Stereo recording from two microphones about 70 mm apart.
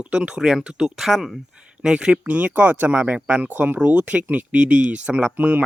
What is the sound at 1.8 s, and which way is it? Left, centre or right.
Speech, centre.